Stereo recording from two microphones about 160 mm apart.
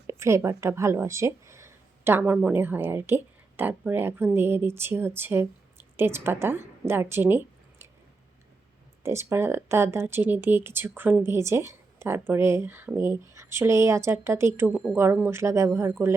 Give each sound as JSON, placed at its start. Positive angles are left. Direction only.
{"t": 0.1, "sound": "a woman's voice", "side_deg": -15}
{"t": 9.0, "sound": "speech", "side_deg": -15}